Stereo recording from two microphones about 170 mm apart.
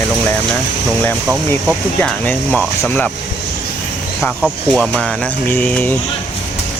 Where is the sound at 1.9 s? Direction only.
10° left (ahead or behind).